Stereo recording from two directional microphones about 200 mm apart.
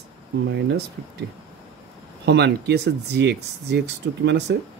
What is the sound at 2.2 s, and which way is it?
Speech, 55° right (ahead or behind).